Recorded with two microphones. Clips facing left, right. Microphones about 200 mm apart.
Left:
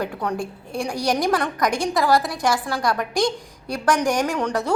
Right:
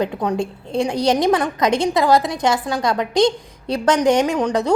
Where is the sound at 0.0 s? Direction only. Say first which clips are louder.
Right 5 dB; 20° right (ahead or behind).